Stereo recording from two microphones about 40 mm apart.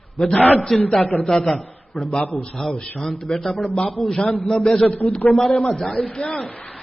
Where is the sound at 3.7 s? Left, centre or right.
Left.